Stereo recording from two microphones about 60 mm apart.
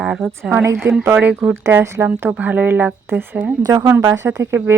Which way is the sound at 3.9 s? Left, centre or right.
Right.